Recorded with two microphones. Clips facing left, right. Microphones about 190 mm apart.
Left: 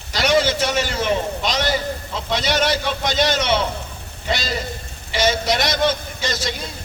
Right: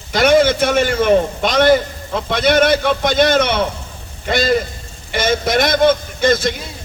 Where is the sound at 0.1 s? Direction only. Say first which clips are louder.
Right 6 dB; 55° right (ahead or behind).